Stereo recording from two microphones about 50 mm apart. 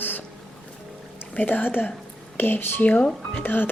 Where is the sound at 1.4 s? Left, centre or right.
Left.